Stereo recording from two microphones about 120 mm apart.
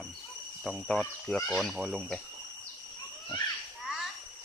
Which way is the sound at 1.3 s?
5° left (ahead or behind).